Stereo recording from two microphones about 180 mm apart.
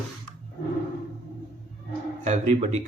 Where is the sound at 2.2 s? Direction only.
40° right (ahead or behind).